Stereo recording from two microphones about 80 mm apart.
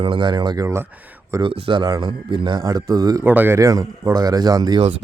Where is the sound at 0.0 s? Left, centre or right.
Right.